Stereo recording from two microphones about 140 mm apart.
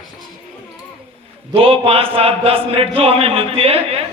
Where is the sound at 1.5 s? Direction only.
40° right (ahead or behind).